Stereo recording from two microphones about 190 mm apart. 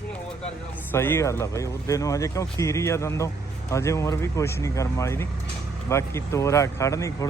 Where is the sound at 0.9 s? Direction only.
10° left (ahead or behind).